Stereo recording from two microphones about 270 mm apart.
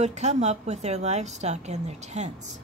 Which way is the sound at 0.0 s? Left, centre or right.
Right.